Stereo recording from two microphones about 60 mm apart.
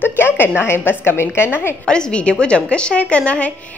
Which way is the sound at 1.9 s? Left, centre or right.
Centre.